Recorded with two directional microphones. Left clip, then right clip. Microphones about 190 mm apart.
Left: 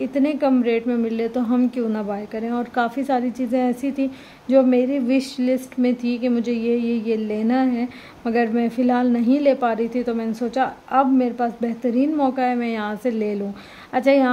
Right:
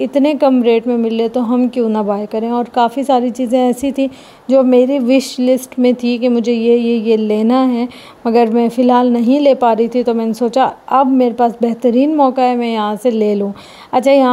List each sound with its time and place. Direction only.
0.0 s a woman's voice: 35° right (ahead or behind)